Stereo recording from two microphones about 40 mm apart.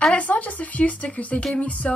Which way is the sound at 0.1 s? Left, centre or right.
Left.